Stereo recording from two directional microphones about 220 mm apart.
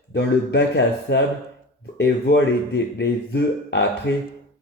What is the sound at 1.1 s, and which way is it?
Speech, 50° left (ahead or behind).